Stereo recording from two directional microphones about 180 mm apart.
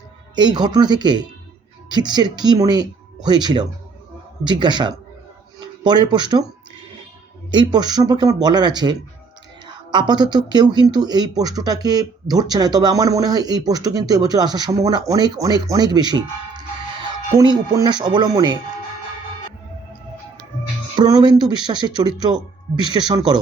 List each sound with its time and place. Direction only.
0.3 s speech: 25° right (ahead or behind)
7.5 s speech: 25° right (ahead or behind)
20.9 s speech: 25° right (ahead or behind)